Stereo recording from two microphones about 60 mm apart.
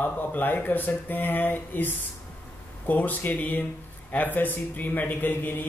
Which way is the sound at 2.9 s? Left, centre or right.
Left.